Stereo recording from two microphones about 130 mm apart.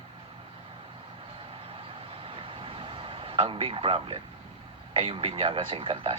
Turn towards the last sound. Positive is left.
turn(degrees=-45)  # may be behind; listen again after turning